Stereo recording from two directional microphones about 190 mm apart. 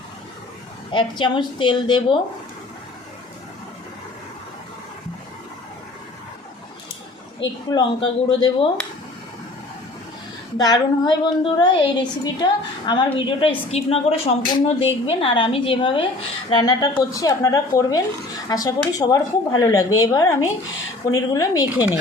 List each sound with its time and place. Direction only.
0.9 s a woman's voice: 25° left (ahead or behind)
7.3 s a woman's voice: 25° left (ahead or behind)
10.6 s a woman's voice: 20° left (ahead or behind)